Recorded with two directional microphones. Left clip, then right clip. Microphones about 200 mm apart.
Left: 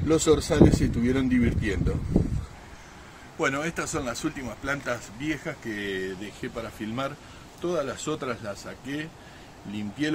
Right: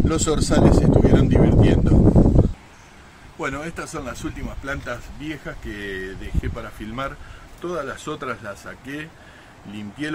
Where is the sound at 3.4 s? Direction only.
5° left (ahead or behind).